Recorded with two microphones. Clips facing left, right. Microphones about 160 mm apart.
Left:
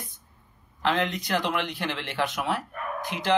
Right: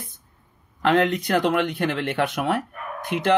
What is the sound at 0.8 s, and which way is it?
Speech, 55° right (ahead or behind).